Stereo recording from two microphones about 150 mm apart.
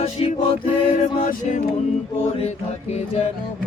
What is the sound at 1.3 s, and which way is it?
Music, 55° left (ahead or behind).